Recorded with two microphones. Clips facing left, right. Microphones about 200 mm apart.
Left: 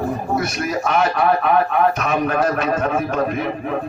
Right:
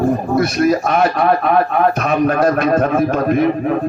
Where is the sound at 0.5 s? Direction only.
40° right (ahead or behind).